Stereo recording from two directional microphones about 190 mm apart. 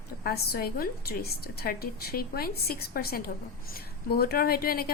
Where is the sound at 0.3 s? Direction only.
55° left (ahead or behind).